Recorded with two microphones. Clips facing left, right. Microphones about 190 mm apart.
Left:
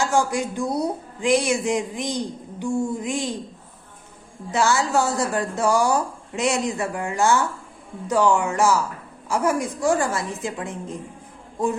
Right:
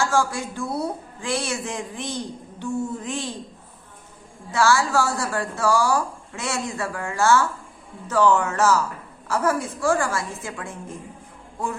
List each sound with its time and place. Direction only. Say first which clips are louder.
0.0 s speech: left 2 dB; 20° left (ahead or behind)
4.5 s speech: even; 20° left (ahead or behind)